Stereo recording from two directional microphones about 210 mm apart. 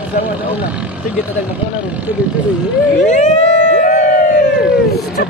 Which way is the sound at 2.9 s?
35° left (ahead or behind).